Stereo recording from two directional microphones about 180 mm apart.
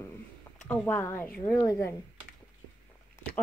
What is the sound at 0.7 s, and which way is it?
A woman's voice, 10° left (ahead or behind).